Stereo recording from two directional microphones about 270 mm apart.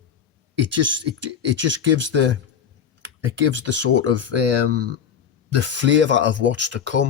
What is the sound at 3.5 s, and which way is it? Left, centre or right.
Speech, right.